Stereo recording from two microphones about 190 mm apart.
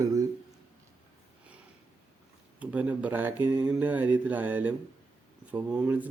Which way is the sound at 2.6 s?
10° right (ahead or behind).